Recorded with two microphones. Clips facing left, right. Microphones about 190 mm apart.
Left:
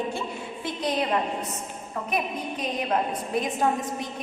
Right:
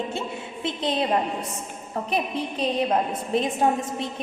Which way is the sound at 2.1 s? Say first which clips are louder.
Right 2 dB; 30° right (ahead or behind).